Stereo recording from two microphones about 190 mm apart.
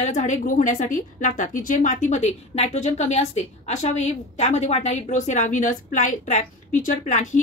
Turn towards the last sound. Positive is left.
turn(degrees=40)  # may be behind; listen again after turning